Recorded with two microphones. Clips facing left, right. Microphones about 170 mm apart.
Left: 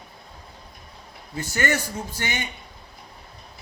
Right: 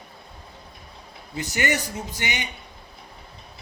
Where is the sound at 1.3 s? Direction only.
20° right (ahead or behind).